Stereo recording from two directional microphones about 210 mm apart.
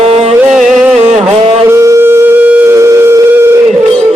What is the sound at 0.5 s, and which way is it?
Music, centre (ahead or behind).